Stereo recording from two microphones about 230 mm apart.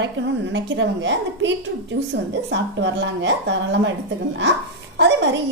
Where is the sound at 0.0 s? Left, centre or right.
Right.